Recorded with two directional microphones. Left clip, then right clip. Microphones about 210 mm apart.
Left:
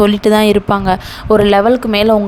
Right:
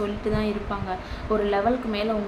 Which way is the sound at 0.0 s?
60° left (ahead or behind).